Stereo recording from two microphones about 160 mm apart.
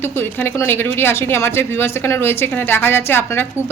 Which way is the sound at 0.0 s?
15° left (ahead or behind).